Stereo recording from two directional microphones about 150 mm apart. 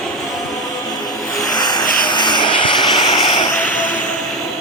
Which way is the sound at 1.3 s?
25° left (ahead or behind).